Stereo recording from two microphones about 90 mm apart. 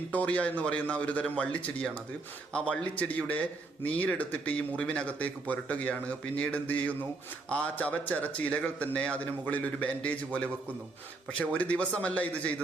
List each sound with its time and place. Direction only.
0.1 s speech: 15° left (ahead or behind)